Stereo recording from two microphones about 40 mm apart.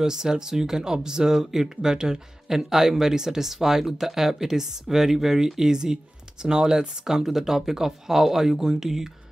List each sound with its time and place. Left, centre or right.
0.0 s speech: centre